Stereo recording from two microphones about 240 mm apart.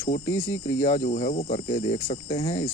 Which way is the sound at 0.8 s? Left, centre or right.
Left.